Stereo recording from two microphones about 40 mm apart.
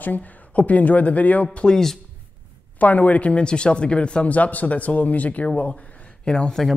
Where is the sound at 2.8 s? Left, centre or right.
Left.